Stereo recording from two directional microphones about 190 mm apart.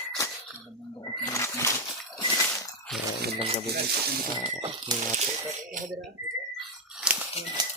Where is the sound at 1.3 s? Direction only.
15° left (ahead or behind).